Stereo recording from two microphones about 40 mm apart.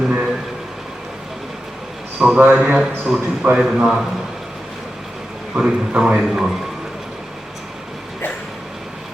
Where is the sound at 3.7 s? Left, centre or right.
Centre.